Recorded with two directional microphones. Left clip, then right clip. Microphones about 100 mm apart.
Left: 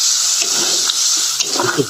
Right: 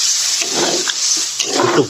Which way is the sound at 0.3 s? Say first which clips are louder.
Even; 40° right (ahead or behind).